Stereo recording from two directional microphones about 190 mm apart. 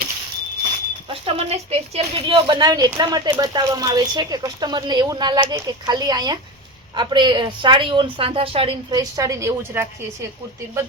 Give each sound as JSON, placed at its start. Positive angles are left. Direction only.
{"t": 1.1, "sound": "speech", "side_deg": -30}
{"t": 9.0, "sound": "a woman's voice", "side_deg": -15}